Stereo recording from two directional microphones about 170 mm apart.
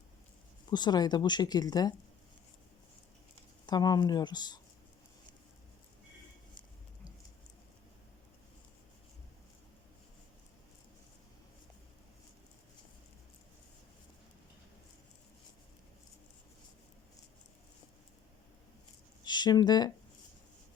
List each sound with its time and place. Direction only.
0.7 s speech: 25° left (ahead or behind)
3.7 s speech: 25° left (ahead or behind)
19.2 s speech: 25° left (ahead or behind)